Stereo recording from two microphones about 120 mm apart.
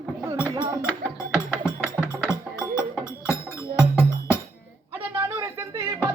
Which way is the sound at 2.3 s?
25° left (ahead or behind).